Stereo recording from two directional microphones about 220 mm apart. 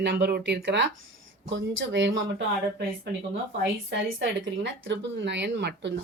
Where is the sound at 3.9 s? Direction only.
60° right (ahead or behind).